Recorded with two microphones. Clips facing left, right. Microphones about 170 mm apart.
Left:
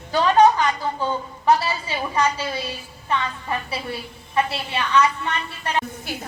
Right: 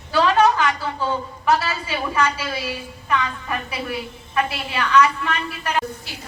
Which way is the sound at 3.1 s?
30° left (ahead or behind).